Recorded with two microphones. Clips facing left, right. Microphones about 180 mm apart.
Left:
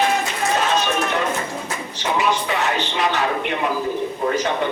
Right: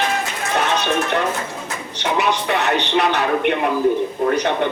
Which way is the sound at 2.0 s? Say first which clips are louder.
Right 1 dB; 65° right (ahead or behind).